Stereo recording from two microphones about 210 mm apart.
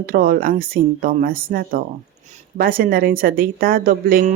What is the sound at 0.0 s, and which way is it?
Speech, 45° right (ahead or behind).